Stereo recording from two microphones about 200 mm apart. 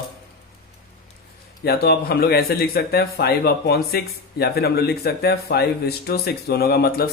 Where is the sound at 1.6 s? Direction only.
50° left (ahead or behind).